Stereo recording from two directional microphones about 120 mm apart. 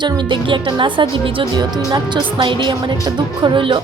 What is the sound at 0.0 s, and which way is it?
A woman's voice, 40° right (ahead or behind).